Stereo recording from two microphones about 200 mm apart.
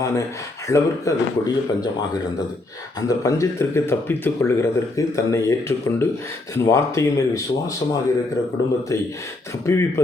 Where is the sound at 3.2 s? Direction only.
15° left (ahead or behind).